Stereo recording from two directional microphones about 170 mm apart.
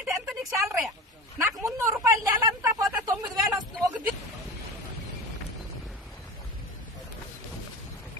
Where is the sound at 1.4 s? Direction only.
15° right (ahead or behind).